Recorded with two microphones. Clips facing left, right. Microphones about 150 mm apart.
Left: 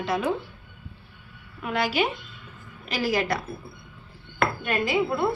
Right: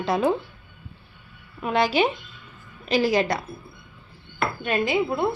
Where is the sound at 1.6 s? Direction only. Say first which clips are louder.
Right 4 dB; 25° right (ahead or behind).